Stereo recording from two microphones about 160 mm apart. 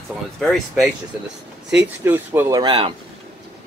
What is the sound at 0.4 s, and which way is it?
Speech, centre (ahead or behind).